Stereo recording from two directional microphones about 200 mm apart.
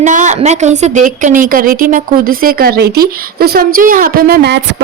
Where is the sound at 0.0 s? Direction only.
40° right (ahead or behind).